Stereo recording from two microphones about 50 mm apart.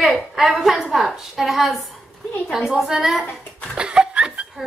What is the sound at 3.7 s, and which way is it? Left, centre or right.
Laughter, centre.